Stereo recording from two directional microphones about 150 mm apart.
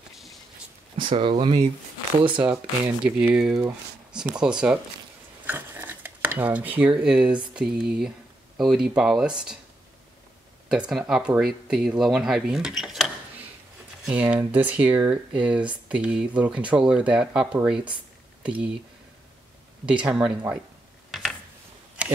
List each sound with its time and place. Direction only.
1.1 s speech: 35° right (ahead or behind)
2.4 s speech: 5° right (ahead or behind)
5.5 s cutlery: 15° right (ahead or behind)
7.5 s speech: 5° right (ahead or behind)
10.7 s speech: 5° right (ahead or behind)
19.9 s speech: 5° right (ahead or behind)
21.1 s gears: centre (ahead or behind)
22.0 s a sound: 10° right (ahead or behind)